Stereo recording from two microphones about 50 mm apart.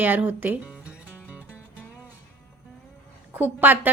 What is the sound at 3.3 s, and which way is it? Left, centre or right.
Speech, right.